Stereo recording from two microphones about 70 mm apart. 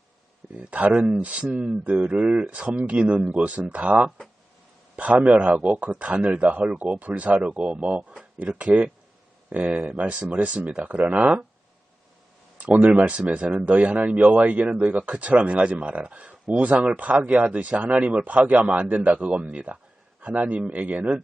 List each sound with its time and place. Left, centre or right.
0.5 s speech: right
5.2 s speech: centre
12.5 s speech: right